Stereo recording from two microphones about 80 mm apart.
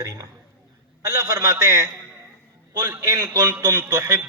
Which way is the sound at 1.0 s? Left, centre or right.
Right.